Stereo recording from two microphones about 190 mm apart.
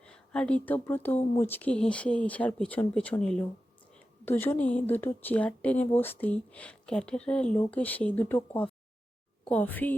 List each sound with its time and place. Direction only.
0.0 s speech: 5° left (ahead or behind)